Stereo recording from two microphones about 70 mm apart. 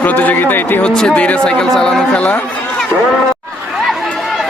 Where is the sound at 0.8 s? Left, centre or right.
Centre.